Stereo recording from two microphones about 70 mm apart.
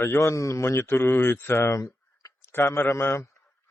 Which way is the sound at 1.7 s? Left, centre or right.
Left.